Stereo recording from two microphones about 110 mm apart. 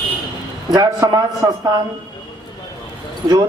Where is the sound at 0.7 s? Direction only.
35° right (ahead or behind).